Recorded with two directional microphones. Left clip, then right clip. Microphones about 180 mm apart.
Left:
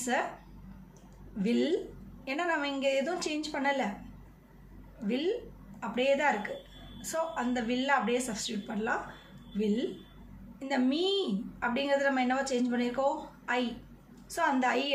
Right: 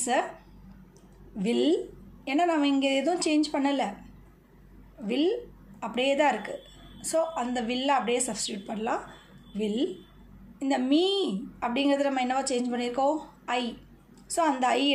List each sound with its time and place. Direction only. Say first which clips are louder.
0.1 s a woman's voice: right 4 dB; 30° right (ahead or behind)
1.4 s a woman's voice: right 4 dB; 30° right (ahead or behind)
5.0 s a woman's voice: right 5 dB; 30° right (ahead or behind)